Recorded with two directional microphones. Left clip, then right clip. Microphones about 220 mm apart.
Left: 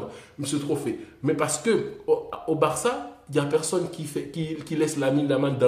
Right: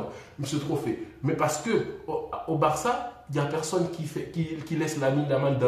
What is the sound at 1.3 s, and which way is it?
A man's voice, 45° left (ahead or behind).